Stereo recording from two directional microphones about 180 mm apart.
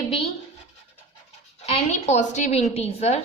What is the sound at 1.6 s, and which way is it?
A woman's voice, 35° left (ahead or behind).